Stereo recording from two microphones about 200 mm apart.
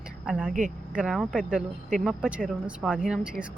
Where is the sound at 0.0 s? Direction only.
5° right (ahead or behind).